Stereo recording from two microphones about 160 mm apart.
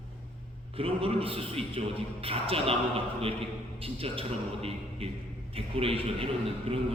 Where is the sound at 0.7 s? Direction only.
35° right (ahead or behind).